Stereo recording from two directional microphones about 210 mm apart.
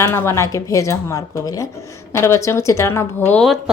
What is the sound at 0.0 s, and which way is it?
A woman's voice, 15° left (ahead or behind).